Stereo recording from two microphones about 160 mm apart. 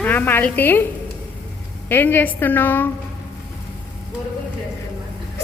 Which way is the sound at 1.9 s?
10° left (ahead or behind).